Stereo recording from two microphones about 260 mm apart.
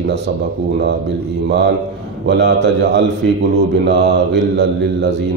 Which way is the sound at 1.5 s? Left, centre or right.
Right.